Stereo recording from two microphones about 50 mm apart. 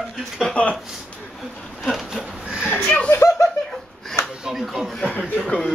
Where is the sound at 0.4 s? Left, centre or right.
Centre.